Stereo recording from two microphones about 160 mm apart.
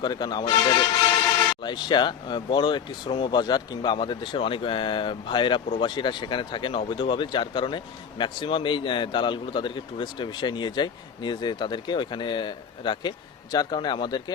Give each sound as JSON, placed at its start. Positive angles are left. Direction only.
{"t": 0.0, "sound": "a man's voice", "side_deg": 25}